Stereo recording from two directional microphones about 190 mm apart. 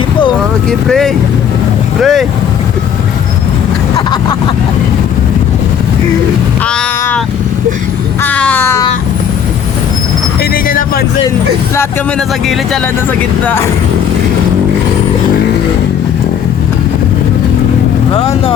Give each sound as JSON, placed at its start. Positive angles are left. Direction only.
{"t": 0.7, "sound": "speech", "side_deg": 0}
{"t": 3.9, "sound": "vehicle", "side_deg": 20}
{"t": 8.2, "sound": "a sound", "side_deg": 5}
{"t": 10.5, "sound": "vehicle", "side_deg": 50}
{"t": 13.4, "sound": "a sound", "side_deg": 10}
{"t": 18.1, "sound": "speech", "side_deg": 30}